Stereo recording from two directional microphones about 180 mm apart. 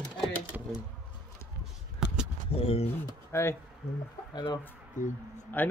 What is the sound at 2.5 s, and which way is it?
Speech, 30° left (ahead or behind).